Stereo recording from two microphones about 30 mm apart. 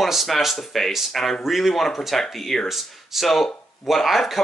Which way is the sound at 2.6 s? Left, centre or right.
Centre.